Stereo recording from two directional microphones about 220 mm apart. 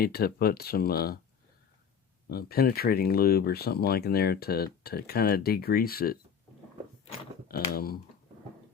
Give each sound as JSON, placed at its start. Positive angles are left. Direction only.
{"t": 0.0, "sound": "speech", "side_deg": 45}
{"t": 2.3, "sound": "speech", "side_deg": 45}
{"t": 7.7, "sound": "speech", "side_deg": 40}